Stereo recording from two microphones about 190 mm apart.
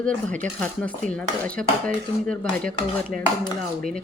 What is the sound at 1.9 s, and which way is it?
Dishes, 5° left (ahead or behind).